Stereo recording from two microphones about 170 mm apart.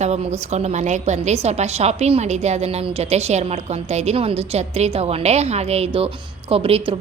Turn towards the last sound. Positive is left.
turn(degrees=-35)  # may be behind; listen again after turning